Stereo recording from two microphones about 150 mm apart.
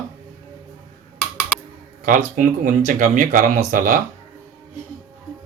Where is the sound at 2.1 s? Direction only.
60° right (ahead or behind).